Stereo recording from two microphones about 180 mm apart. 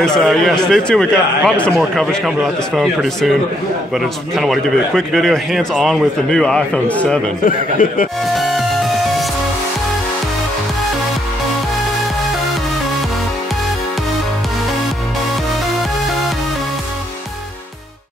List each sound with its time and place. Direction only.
0.0 s a man's voice: centre (ahead or behind)
7.4 s speech: 50° left (ahead or behind)
8.4 s music: centre (ahead or behind)